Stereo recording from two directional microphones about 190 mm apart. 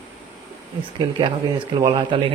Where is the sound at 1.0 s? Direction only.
25° right (ahead or behind).